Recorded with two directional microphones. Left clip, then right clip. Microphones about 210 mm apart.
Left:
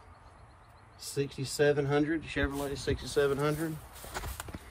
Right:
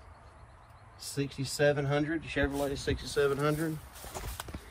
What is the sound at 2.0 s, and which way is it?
Speech, centre (ahead or behind).